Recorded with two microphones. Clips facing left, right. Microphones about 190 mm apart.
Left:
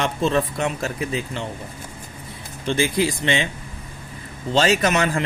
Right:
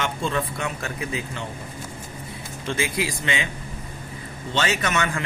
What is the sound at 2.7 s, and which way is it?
Speech, 30° left (ahead or behind).